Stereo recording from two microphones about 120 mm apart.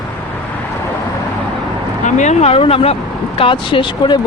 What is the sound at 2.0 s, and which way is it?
Speech, 85° left.